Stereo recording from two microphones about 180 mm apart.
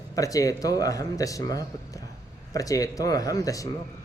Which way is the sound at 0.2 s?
20° left (ahead or behind).